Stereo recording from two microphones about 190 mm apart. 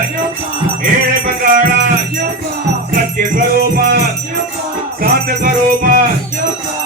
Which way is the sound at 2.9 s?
50° right (ahead or behind).